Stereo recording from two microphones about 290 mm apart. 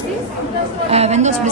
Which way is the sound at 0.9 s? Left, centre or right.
Right.